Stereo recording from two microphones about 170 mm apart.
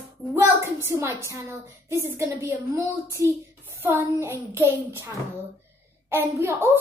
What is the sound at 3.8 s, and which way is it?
Speech, 15° right (ahead or behind).